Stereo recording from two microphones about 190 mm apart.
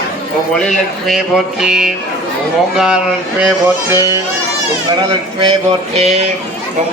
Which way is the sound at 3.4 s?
5° right (ahead or behind).